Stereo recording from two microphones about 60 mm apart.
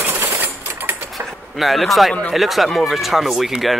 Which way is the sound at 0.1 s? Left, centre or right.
Right.